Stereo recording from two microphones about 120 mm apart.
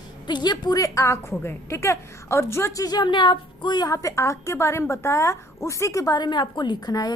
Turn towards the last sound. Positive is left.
turn(degrees=35)  # may be behind; listen again after turning